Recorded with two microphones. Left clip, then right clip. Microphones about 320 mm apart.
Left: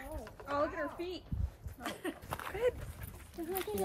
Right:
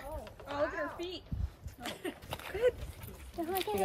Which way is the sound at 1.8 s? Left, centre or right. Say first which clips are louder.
Even; centre.